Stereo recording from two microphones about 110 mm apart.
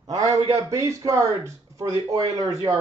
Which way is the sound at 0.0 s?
35° right (ahead or behind).